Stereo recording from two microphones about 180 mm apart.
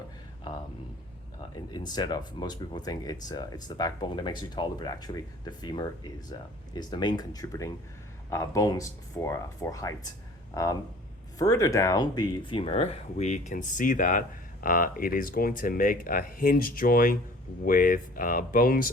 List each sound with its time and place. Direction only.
1.4 s speech: 25° left (ahead or behind); by 18.9 s 55° left (ahead or behind)